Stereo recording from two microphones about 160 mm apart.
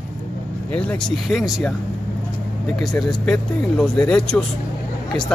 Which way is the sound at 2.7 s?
Centre (ahead or behind).